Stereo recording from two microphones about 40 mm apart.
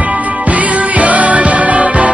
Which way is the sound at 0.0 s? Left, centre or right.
Right.